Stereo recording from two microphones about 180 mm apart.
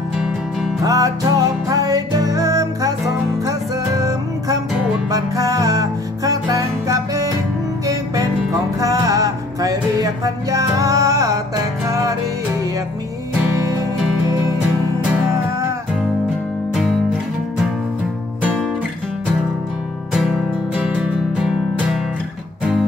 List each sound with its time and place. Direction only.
0.8 s music: 20° right (ahead or behind)
13.7 s music: 15° right (ahead or behind)
20.1 s music: centre (ahead or behind)